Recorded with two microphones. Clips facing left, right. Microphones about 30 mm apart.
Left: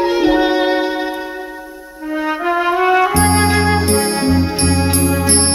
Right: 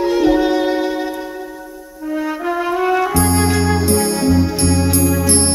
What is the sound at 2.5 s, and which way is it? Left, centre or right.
Music, left.